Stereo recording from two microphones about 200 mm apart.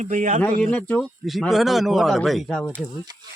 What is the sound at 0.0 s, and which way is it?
Speech, 40° right (ahead or behind).